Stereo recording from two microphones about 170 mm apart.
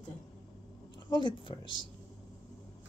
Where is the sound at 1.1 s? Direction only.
30° left (ahead or behind).